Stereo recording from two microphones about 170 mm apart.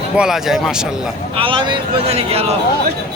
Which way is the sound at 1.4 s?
30° right (ahead or behind).